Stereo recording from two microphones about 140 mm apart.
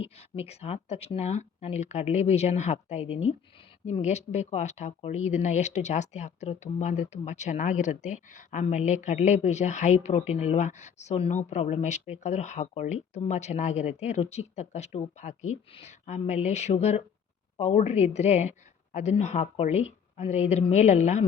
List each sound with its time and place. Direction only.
0.0 s speech: 45° left (ahead or behind)